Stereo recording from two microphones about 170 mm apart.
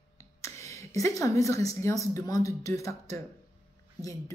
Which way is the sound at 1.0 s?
20° left (ahead or behind).